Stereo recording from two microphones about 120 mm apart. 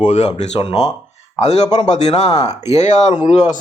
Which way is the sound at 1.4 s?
65° left (ahead or behind).